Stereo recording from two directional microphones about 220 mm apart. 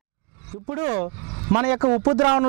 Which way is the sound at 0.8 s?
35° right (ahead or behind).